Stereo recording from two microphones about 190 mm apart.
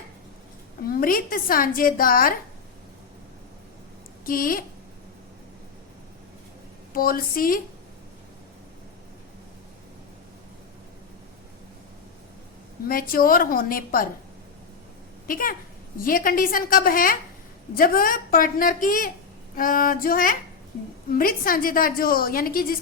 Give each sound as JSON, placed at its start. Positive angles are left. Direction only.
{"t": 0.9, "sound": "a woman's voice", "side_deg": 50}
{"t": 4.3, "sound": "a woman's voice", "side_deg": 50}
{"t": 6.9, "sound": "a woman's voice", "side_deg": 50}
{"t": 12.9, "sound": "a woman's voice", "side_deg": 50}
{"t": 15.3, "sound": "a woman's voice", "side_deg": 50}